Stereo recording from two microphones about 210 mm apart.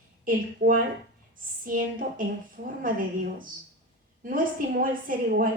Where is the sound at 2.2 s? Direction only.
40° right (ahead or behind).